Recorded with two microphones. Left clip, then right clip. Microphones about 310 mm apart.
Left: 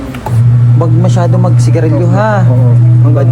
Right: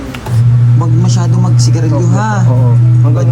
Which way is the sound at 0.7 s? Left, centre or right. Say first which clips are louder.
Left 7 dB; centre.